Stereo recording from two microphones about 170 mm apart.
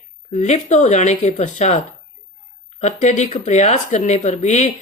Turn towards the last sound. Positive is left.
turn(degrees=40)  # may be behind; listen again after turning